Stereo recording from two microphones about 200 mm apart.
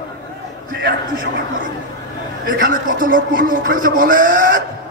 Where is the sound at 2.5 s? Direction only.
45° right (ahead or behind).